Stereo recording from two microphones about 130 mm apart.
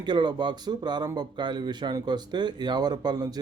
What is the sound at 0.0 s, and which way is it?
Speech, 35° right (ahead or behind).